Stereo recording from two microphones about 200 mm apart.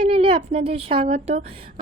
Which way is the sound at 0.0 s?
30° right (ahead or behind).